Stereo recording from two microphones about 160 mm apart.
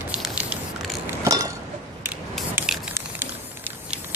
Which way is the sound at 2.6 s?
10° right (ahead or behind).